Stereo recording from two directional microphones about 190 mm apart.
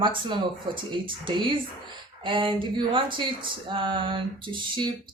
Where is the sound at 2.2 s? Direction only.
25° right (ahead or behind).